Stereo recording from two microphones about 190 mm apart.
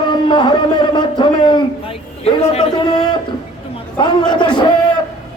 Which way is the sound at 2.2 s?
30° left (ahead or behind).